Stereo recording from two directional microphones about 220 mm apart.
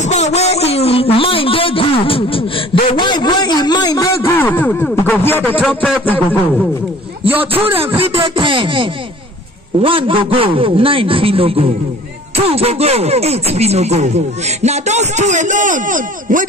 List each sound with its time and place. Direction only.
0.0 s a man's voice: 30° left (ahead or behind); by 6.7 s 5° left (ahead or behind)
7.2 s a man's voice: 25° right (ahead or behind)